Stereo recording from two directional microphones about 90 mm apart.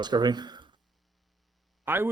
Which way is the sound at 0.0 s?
55° right (ahead or behind).